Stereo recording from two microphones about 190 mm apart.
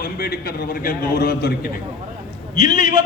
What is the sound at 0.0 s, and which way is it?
A man's voice, 50° left (ahead or behind).